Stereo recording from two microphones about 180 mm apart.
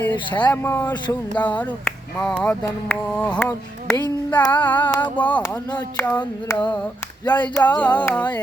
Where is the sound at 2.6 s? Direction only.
10° left (ahead or behind).